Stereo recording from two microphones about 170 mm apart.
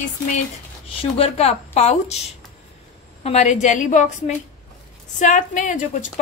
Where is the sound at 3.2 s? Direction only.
40° left (ahead or behind).